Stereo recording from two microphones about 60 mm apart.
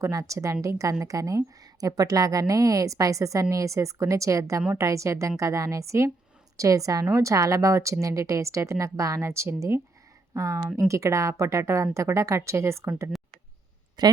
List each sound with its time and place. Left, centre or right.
0.0 s a woman's voice: right
10.3 s a woman's voice: right
14.0 s a woman's voice: right